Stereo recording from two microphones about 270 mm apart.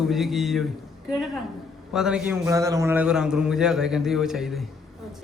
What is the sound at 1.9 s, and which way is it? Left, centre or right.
A man's voice, centre.